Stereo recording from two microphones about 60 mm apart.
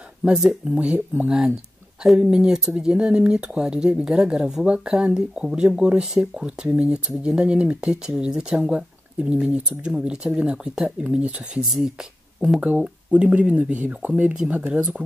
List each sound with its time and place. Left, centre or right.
0.5 s speech: right
2.1 s speech: centre
12.5 s speech: right